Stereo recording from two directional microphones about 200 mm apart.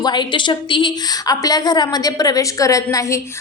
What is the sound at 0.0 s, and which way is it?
A woman's voice, 20° left (ahead or behind).